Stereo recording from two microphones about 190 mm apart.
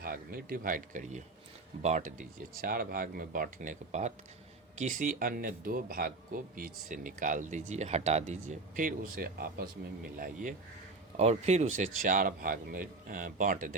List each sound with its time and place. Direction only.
0.0 s speech: 50° right (ahead or behind)
11.2 s speech: 35° right (ahead or behind)